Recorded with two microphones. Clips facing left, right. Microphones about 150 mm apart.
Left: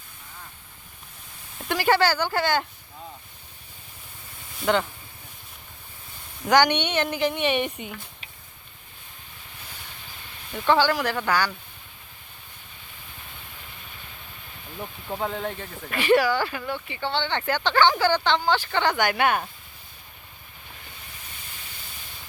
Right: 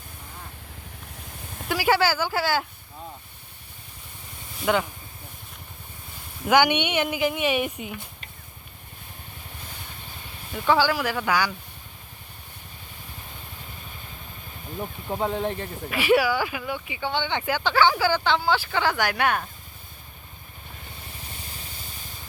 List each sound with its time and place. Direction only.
1.6 s speech: 5° right (ahead or behind)
4.6 s speech: 5° right (ahead or behind)
6.5 s speech: 10° right (ahead or behind)
10.5 s speech: 5° right (ahead or behind)
15.0 s speech: 20° right (ahead or behind)
15.4 s speech: 35° right (ahead or behind)
15.9 s speech: 10° right (ahead or behind)